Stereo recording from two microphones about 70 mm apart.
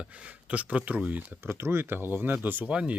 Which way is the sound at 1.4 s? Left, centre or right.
Right.